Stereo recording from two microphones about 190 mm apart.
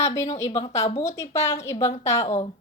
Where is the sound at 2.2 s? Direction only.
35° left (ahead or behind).